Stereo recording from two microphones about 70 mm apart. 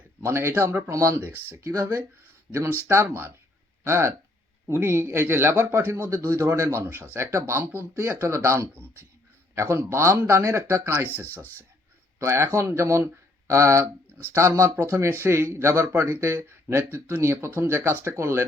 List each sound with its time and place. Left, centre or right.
0.2 s speech: right
0.8 s speech: right
2.5 s speech: right
3.1 s speech: right
8.7 s speech: right
12.2 s speech: right